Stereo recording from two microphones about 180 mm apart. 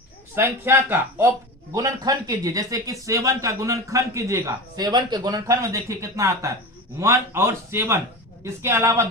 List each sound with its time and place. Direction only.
0.3 s speech: 10° right (ahead or behind)